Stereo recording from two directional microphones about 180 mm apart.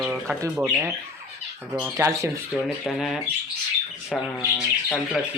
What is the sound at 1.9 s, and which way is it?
Speech, 15° right (ahead or behind).